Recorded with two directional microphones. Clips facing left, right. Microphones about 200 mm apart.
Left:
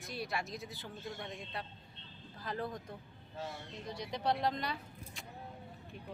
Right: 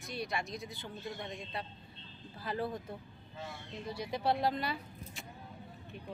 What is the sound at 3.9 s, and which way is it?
Speech, 5° right (ahead or behind).